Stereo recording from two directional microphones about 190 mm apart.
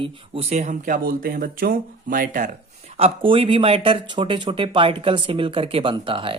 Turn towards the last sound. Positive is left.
turn(degrees=-25)  # may be behind; listen again after turning